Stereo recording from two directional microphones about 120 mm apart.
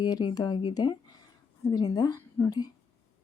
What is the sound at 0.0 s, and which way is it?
Speech, 35° left (ahead or behind).